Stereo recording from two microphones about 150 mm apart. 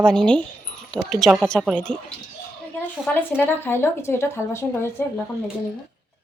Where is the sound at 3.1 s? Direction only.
15° left (ahead or behind).